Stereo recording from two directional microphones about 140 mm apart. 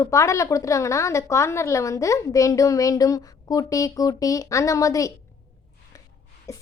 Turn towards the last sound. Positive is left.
turn(degrees=25)  # may be behind; listen again after turning